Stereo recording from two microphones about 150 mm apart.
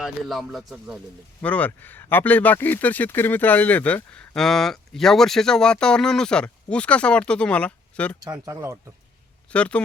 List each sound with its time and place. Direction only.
0.0 s speech: centre (ahead or behind)
1.4 s speech: 10° left (ahead or behind)
8.2 s speech: 20° right (ahead or behind)
9.5 s speech: 10° left (ahead or behind)